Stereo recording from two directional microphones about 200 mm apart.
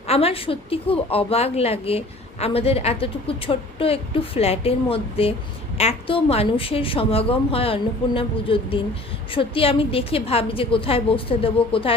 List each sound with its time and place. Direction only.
0.1 s a woman's voice: 30° left (ahead or behind)